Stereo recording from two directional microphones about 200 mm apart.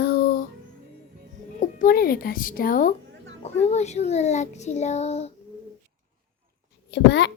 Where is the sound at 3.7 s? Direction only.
35° left (ahead or behind).